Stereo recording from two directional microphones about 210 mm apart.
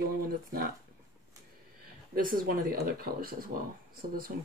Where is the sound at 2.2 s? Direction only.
45° right (ahead or behind).